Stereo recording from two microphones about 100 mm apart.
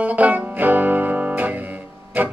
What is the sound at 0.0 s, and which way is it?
Music, 15° right (ahead or behind).